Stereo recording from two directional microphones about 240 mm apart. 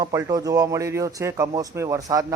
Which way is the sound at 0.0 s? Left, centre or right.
Centre.